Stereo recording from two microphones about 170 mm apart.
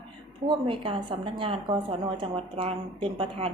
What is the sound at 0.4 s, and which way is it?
A woman's voice, 30° right (ahead or behind).